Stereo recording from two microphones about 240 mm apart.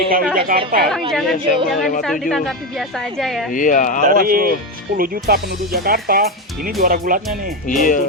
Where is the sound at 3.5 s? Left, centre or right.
Left.